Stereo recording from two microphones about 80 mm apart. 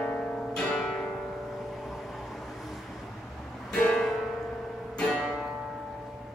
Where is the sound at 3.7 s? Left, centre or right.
Centre.